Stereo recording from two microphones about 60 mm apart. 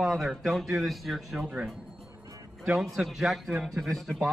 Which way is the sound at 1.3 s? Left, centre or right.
Right.